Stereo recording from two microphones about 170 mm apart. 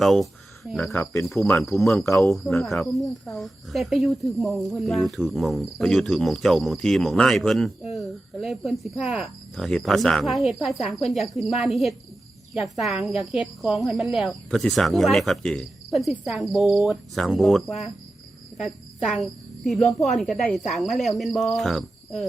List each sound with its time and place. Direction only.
0.0 s speech: centre (ahead or behind)
1.4 s cricket: 15° left (ahead or behind)
1.6 s speech: centre (ahead or behind)